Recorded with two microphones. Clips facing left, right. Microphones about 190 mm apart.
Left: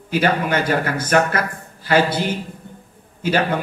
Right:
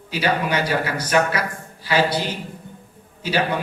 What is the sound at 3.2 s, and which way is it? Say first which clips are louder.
Speech: left 3 dB; 50° left (ahead or behind).